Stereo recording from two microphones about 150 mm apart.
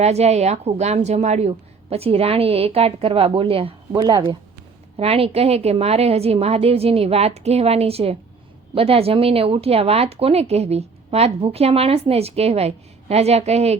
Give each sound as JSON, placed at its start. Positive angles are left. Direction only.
{"t": 0.0, "sound": "speech", "side_deg": -45}
{"t": 4.9, "sound": "a woman's voice", "side_deg": -40}